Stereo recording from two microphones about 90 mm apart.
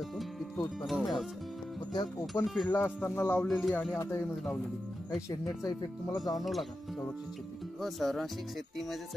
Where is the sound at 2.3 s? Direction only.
35° left (ahead or behind).